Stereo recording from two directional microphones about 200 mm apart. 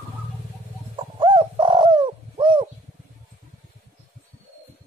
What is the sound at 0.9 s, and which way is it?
Bird, 25° right (ahead or behind).